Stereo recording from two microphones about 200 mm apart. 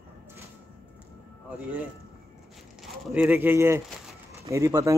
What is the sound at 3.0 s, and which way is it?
Speech, 5° right (ahead or behind).